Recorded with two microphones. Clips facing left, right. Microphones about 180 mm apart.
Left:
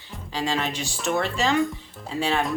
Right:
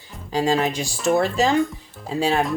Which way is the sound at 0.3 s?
40° right (ahead or behind).